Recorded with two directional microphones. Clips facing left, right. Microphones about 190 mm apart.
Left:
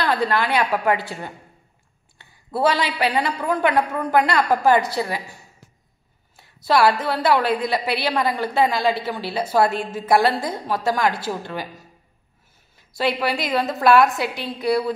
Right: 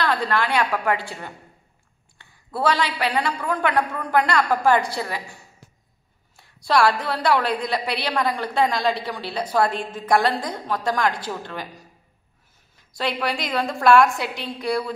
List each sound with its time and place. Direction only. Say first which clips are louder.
0.0 s a woman's voice: left 2 dB; 20° left (ahead or behind)
2.1 s a man's voice: left 3 dB; 20° left (ahead or behind)
6.3 s a woman's voice: left 1 dB; 5° left (ahead or behind)
12.7 s a woman's voice: left 4 dB; 5° left (ahead or behind)